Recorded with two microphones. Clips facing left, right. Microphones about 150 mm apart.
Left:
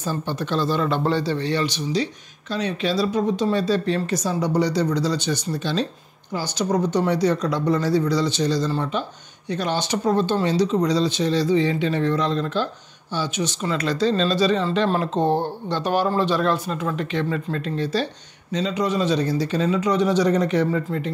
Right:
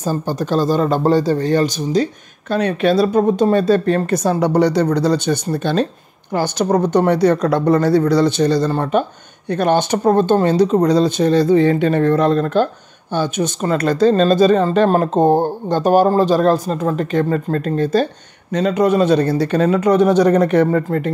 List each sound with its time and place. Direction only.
0.0 s speech: 40° right (ahead or behind)
2.5 s speech: 55° right (ahead or behind)